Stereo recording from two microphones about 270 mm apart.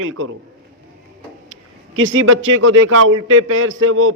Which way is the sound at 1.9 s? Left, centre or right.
Right.